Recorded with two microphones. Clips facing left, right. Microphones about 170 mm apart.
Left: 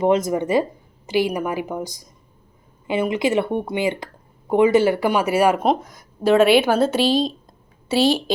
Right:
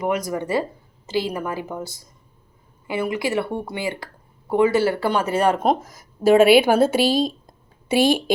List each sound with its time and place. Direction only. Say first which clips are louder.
0.0 s a woman's voice: left 5 dB; 25° left (ahead or behind); by 8.2 s 15° right (ahead or behind)